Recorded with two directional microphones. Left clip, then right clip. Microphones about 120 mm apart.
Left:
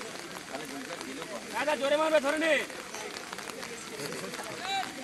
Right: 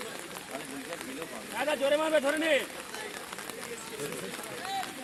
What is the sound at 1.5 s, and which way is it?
Speech, 90° right.